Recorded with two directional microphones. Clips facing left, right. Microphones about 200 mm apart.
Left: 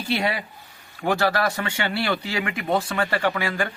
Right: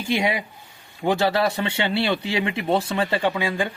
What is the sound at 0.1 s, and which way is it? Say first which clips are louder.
A man's voice: right 2 dB; 15° right (ahead or behind).